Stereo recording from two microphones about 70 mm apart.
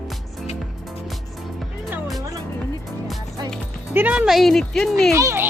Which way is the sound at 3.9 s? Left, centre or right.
Right.